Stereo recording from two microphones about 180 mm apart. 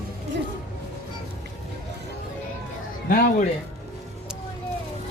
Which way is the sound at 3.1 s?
50° left (ahead or behind).